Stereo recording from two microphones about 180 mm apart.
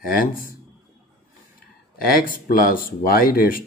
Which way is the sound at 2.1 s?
55° left (ahead or behind).